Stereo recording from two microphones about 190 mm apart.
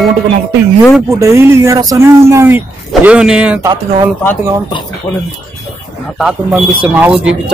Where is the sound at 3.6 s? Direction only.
25° right (ahead or behind).